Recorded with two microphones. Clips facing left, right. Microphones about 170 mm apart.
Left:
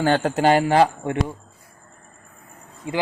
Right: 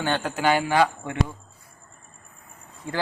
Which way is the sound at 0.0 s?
35° left (ahead or behind).